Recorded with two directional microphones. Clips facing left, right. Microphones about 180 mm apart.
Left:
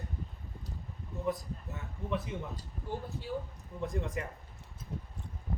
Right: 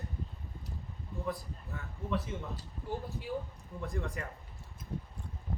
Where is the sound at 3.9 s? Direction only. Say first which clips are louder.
Left 1 dB; 20° left (ahead or behind).